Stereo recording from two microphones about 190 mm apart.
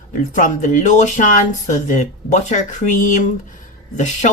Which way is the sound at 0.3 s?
45° left (ahead or behind).